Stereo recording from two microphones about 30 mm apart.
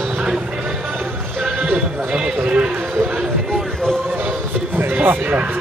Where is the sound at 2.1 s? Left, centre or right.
Right.